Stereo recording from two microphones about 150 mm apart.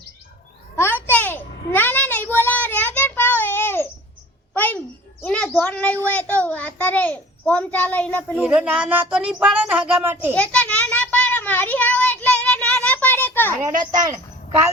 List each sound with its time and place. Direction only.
0.8 s a sound: 15° left (ahead or behind)
5.2 s child singing: 10° left (ahead or behind)
6.1 s a child's voice: 10° left (ahead or behind)
8.4 s speech: 10° right (ahead or behind)
10.3 s child singing: 10° left (ahead or behind)
13.9 s a woman's voice: 25° right (ahead or behind)